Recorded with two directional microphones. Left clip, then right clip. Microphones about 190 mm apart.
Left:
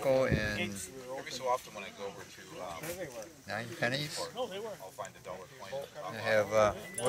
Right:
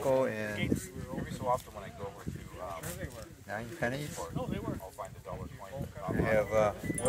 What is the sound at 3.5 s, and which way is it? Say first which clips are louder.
Speech: left 1 dB; 30° right (ahead or behind).